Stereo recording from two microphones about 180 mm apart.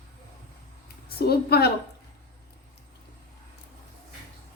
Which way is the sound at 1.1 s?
60° left (ahead or behind).